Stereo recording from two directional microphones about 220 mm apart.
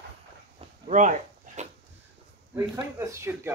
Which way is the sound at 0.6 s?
35° right (ahead or behind).